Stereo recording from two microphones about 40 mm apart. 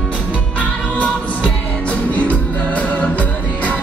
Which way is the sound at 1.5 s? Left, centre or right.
Left.